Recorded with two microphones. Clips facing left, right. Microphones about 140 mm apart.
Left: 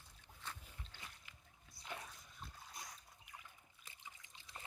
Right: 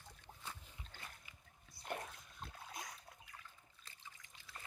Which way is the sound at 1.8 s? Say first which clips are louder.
Right 5 dB; 55° right (ahead or behind).